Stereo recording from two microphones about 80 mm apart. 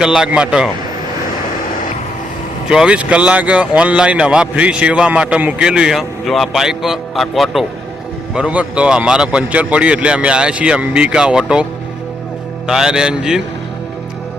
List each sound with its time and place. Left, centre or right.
0.0 s speech: centre
2.6 s speech: centre
8.4 s speech: centre
12.6 s speech: centre